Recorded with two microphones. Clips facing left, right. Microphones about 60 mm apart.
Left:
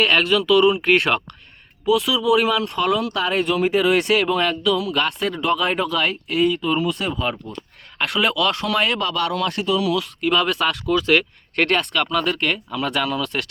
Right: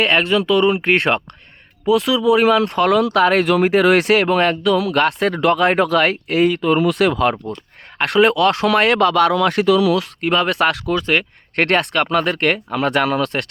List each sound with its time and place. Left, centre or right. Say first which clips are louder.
0.0 s speech: right 2 dB; right
1.8 s speech: right 3 dB; right
2.6 s speech: right 6 dB; right
4.8 s speech: right 5 dB; right
8.0 s speech: right 6 dB; right
10.2 s speech: right 2 dB; right
10.6 s speech: right 5 dB; right
11.0 s speech: left 2 dB; right
11.5 s speech: right 3 dB; right
12.4 s speech: right 5 dB; right